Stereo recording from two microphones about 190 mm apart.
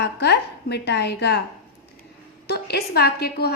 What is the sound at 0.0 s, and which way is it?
A woman's voice, 60° left (ahead or behind).